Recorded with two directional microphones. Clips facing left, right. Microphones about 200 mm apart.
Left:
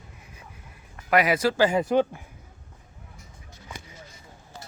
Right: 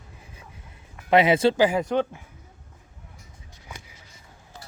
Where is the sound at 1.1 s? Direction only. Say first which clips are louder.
Right 4 dB; 25° right (ahead or behind).